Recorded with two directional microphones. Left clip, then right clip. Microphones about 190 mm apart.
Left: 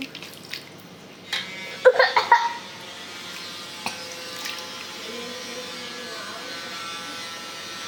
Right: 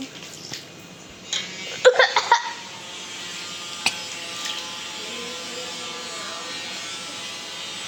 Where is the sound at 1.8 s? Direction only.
30° right (ahead or behind).